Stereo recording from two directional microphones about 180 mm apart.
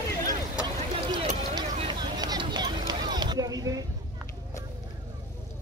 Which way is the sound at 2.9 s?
25° right (ahead or behind).